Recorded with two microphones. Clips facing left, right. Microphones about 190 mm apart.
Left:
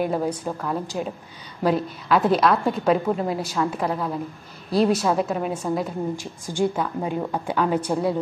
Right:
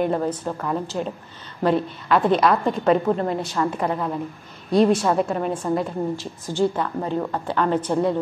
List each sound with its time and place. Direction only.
0.0 s a woman's voice: 5° left (ahead or behind)